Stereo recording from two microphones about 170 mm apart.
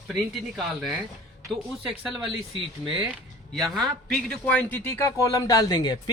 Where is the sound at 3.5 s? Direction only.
Centre (ahead or behind).